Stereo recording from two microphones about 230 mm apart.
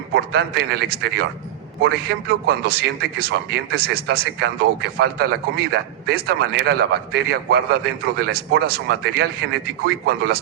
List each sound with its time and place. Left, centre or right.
0.1 s a man's voice: right